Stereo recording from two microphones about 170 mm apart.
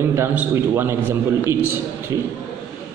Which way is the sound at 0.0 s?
15° right (ahead or behind).